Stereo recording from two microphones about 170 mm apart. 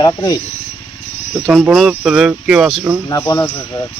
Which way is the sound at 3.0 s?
20° left (ahead or behind).